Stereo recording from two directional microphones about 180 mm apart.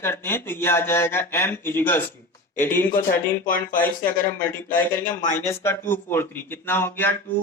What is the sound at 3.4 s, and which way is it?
Speech, 50° left (ahead or behind).